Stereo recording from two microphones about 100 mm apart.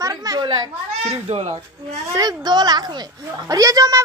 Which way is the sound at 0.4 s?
45° right (ahead or behind).